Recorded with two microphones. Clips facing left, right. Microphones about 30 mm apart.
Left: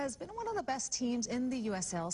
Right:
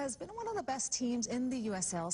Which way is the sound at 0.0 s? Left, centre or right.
Left.